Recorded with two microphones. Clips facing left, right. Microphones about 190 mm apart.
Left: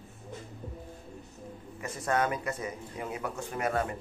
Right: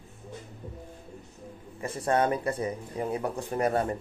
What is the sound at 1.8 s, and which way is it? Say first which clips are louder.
Speech: right 4 dB; 30° right (ahead or behind).